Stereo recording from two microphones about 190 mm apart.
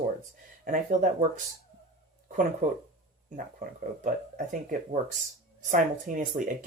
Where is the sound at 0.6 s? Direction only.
45° right (ahead or behind).